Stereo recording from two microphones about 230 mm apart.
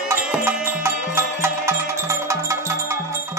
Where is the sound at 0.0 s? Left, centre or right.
Centre.